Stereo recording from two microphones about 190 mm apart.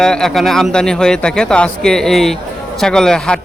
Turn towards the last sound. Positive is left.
turn(degrees=5)  # may be behind; listen again after turning